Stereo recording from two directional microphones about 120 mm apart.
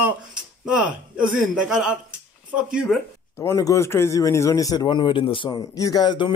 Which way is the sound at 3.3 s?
20° left (ahead or behind).